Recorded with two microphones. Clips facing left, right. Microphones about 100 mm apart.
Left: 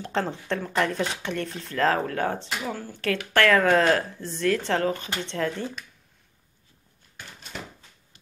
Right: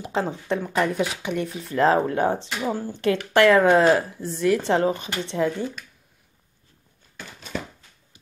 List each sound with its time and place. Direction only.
0.0 s a woman's voice: 10° right (ahead or behind)